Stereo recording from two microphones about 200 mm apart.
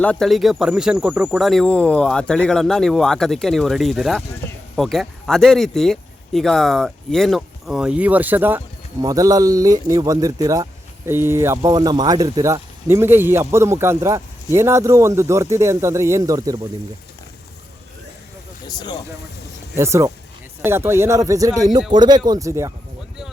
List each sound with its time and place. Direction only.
0.0 s speech: 5° left (ahead or behind); by 16.6 s 15° right (ahead or behind)
18.7 s speech: 20° left (ahead or behind)
19.7 s speech: 15° right (ahead or behind)